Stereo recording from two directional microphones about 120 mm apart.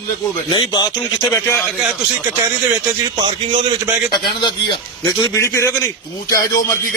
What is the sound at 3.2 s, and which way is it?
Speech, 45° right (ahead or behind).